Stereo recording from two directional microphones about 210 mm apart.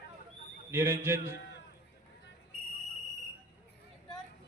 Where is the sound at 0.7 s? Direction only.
10° right (ahead or behind).